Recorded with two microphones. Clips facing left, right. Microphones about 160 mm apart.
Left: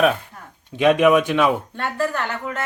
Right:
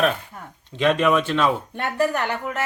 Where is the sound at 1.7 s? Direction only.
15° right (ahead or behind).